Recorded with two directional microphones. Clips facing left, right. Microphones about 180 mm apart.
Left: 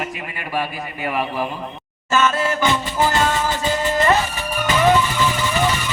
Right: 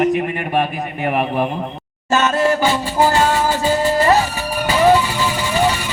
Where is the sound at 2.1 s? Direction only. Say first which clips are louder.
Right 3 dB; 40° right (ahead or behind).